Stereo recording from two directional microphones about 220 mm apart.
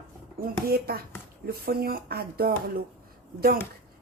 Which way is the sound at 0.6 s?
45° right (ahead or behind).